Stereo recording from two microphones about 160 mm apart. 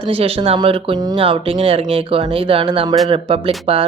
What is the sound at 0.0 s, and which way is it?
Speech, 35° right (ahead or behind).